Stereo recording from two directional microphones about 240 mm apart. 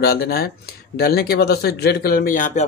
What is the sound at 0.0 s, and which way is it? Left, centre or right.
Speech, left.